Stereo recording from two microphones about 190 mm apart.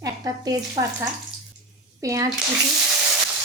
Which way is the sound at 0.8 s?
30° right (ahead or behind).